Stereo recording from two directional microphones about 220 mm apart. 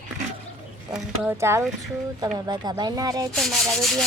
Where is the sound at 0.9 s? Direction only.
10° right (ahead or behind).